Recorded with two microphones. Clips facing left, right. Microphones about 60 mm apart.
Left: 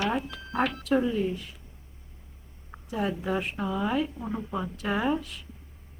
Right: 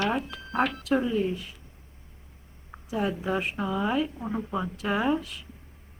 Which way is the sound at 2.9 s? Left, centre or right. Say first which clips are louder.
Right 1 dB; centre.